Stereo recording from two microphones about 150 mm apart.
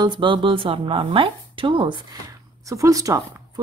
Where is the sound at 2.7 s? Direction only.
20° right (ahead or behind).